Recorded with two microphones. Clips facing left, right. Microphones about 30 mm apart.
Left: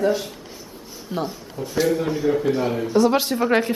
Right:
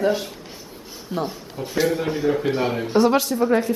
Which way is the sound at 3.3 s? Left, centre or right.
Left.